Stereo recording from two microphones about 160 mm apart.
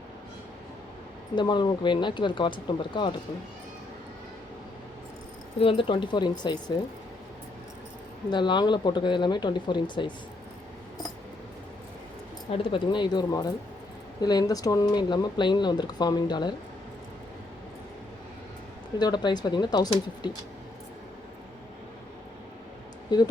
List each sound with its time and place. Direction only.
1.4 s speech: 30° left (ahead or behind)
5.5 s speech: 35° left (ahead or behind)
8.3 s speech: 30° left (ahead or behind)
12.5 s speech: 35° left (ahead or behind)
18.9 s speech: 25° left (ahead or behind)
23.1 s speech: 25° left (ahead or behind)